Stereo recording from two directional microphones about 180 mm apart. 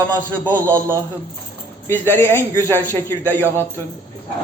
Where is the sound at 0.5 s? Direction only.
15° right (ahead or behind).